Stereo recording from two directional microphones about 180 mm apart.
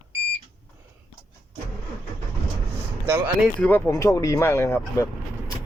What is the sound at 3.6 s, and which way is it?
Speech, 10° left (ahead or behind).